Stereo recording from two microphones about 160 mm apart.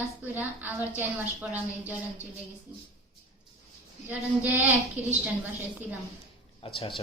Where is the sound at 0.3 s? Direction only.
10° right (ahead or behind).